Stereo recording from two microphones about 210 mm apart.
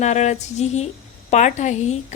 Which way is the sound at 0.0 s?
35° left (ahead or behind).